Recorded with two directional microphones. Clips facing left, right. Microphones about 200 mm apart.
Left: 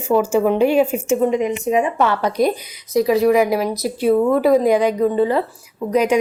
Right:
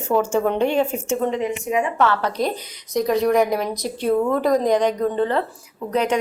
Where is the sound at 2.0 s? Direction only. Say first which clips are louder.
Left 3 dB; 15° left (ahead or behind).